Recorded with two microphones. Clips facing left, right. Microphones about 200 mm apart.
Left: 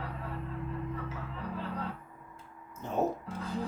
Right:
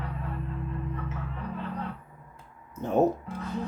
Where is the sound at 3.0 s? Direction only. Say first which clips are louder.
Right 7 dB; 60° right (ahead or behind).